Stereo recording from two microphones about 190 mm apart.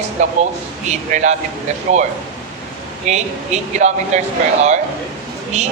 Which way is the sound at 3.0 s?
35° right (ahead or behind).